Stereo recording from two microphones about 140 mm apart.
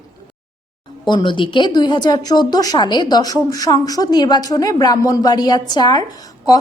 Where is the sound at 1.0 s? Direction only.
35° left (ahead or behind).